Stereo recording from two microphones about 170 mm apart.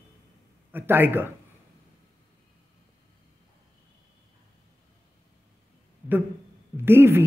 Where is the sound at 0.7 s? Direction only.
10° right (ahead or behind).